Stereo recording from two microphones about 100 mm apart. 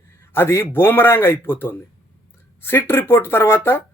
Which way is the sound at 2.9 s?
20° left (ahead or behind).